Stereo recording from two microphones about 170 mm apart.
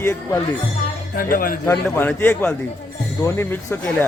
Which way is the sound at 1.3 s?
55° left (ahead or behind).